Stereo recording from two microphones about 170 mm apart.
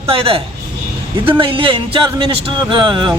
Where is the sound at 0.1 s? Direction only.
35° right (ahead or behind).